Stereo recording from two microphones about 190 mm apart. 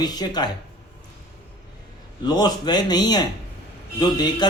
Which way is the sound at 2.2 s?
20° left (ahead or behind).